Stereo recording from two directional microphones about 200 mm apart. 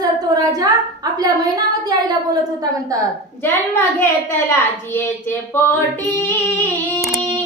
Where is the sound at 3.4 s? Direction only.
10° left (ahead or behind).